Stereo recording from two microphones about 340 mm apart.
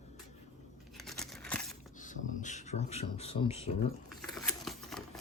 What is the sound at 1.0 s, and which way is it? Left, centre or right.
Crumpling, centre.